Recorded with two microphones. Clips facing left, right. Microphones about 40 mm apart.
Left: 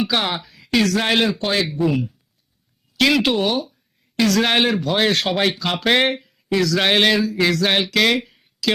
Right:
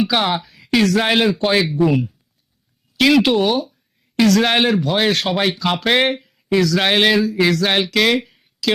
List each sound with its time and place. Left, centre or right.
0.0 s speech: centre
3.0 s speech: centre